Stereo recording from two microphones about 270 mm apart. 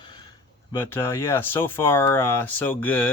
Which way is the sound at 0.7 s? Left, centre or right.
Centre.